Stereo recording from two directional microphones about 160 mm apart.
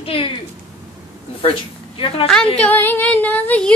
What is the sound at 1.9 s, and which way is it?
Speech, 35° left (ahead or behind).